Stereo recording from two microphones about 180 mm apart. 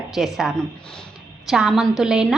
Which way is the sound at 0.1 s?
Centre (ahead or behind).